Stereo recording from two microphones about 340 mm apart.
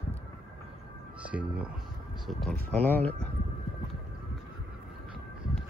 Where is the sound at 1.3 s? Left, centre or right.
Centre.